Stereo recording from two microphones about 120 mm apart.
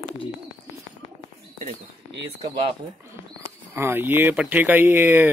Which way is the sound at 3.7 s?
20° right (ahead or behind).